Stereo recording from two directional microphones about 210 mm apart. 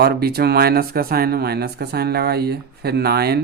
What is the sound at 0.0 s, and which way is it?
Speech, 50° right (ahead or behind).